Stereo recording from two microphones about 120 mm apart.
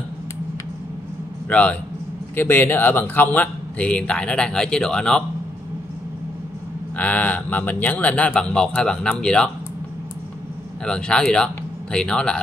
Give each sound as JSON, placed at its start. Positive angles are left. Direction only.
{"t": 1.5, "sound": "speech", "side_deg": 10}
{"t": 7.0, "sound": "speech", "side_deg": 15}
{"t": 10.9, "sound": "speech", "side_deg": 5}